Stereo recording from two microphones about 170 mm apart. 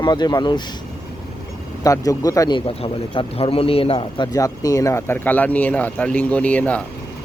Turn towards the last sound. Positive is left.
turn(degrees=10)  # may be behind; listen again after turning